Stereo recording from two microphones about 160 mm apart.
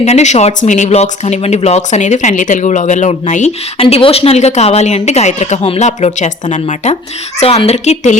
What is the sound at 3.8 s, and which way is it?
Speech, 35° left (ahead or behind).